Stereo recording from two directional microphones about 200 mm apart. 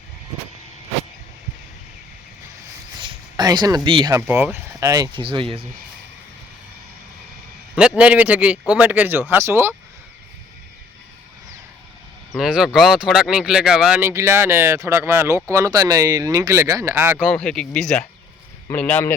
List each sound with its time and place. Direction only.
3.0 s a sound: 20° right (ahead or behind)
3.8 s speech: 25° right (ahead or behind)
4.1 s speech: 10° right (ahead or behind); by 5.6 s 25° right (ahead or behind)
7.8 s speech: 5° right (ahead or behind)
12.3 s speech: centre (ahead or behind)
17.3 s speech: 5° left (ahead or behind)